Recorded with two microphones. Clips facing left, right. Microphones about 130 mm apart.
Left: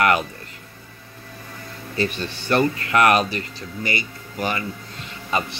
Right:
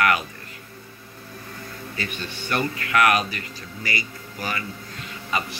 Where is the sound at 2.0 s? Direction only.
30° left (ahead or behind).